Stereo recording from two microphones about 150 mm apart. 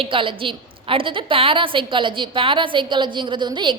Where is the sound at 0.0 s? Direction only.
35° right (ahead or behind).